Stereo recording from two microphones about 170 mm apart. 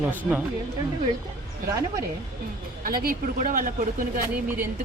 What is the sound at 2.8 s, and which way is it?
A woman's voice, 60° right (ahead or behind).